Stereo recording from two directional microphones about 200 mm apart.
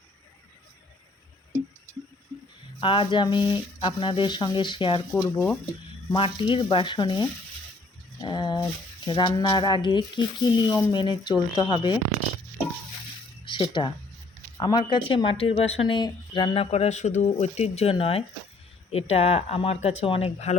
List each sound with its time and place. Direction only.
2.8 s speech: 25° left (ahead or behind)
6.1 s speech: 25° left (ahead or behind)
8.2 s a sound: 20° left (ahead or behind)
9.0 s speech: 25° left (ahead or behind)
13.4 s a sound: 25° left (ahead or behind)
14.6 s speech: 20° left (ahead or behind)